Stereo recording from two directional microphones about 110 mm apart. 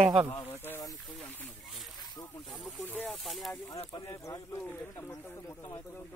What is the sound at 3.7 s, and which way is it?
Speech, 35° left (ahead or behind).